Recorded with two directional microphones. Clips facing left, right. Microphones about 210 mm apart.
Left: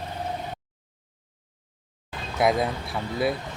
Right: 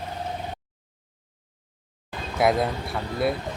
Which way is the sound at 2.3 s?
Centre (ahead or behind).